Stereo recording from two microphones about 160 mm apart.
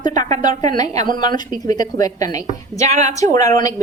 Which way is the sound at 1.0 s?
30° left (ahead or behind).